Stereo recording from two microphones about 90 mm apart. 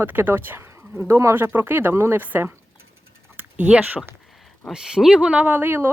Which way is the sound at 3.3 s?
15° right (ahead or behind).